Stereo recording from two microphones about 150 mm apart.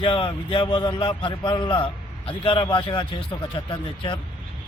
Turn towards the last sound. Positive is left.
turn(degrees=35)  # may be behind; listen again after turning